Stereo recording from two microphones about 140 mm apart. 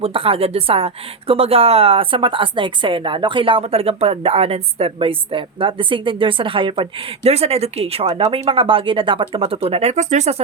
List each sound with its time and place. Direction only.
0.0 s speech: 40° right (ahead or behind)